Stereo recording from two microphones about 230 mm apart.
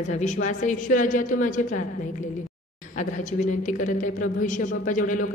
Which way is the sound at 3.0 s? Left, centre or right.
Left.